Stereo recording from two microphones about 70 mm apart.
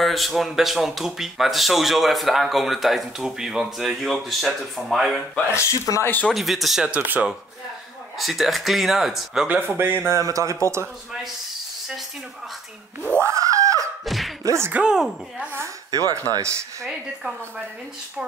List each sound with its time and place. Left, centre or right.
0.0 s speech: centre
5.5 s speech: left
6.3 s speech: centre
7.0 s speech: right
8.2 s speech: centre
9.5 s speech: right
10.1 s speech: right
13.3 s a sound: right
14.0 s a sound: centre
14.4 s speech: right
14.7 s speech: centre
15.9 s speech: right